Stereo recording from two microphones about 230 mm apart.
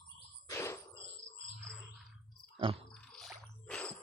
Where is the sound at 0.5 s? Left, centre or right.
Centre.